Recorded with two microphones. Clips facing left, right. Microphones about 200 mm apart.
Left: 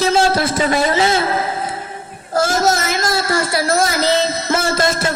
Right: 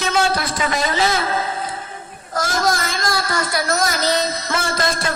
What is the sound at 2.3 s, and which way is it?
A woman's voice, 25° left (ahead or behind).